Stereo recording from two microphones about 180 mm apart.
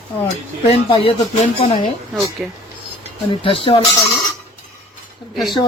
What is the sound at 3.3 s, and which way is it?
Speech, 30° left (ahead or behind).